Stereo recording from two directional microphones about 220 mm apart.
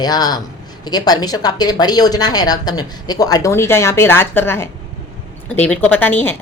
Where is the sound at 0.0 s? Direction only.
20° left (ahead or behind).